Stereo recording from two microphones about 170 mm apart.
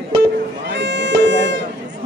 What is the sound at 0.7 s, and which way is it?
Music, 90° right.